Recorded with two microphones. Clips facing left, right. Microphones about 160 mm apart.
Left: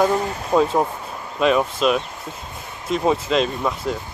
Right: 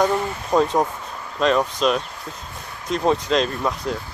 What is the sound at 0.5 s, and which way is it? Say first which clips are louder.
Speech: left 1 dB; 5° left (ahead or behind).